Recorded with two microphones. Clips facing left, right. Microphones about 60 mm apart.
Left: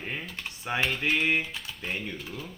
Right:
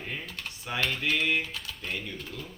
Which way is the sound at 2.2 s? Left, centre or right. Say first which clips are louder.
Left 1 dB; centre.